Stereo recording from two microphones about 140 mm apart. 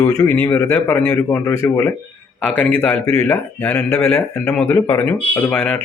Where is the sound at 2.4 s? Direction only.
10° left (ahead or behind).